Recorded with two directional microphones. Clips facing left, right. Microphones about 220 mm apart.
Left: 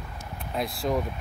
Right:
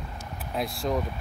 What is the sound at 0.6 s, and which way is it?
Speech, centre (ahead or behind).